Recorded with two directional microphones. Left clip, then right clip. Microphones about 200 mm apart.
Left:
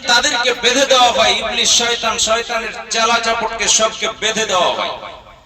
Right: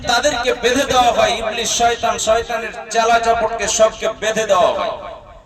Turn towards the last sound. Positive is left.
turn(degrees=-55)  # may be behind; listen again after turning